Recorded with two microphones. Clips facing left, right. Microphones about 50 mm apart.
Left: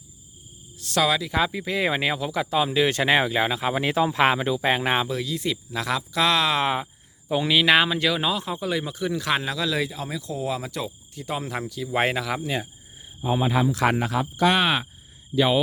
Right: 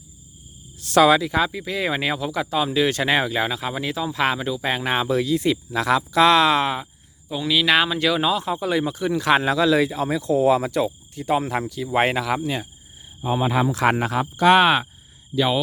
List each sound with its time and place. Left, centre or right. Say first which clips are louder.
0.9 s speech: right 7 dB; centre
1.3 s speech: right 2 dB; centre
5.0 s speech: right 7 dB; centre
6.6 s speech: right 1 dB; centre
9.4 s speech: right 8 dB; centre
10.7 s speech: right 9 dB; centre
15.4 s speech: even; centre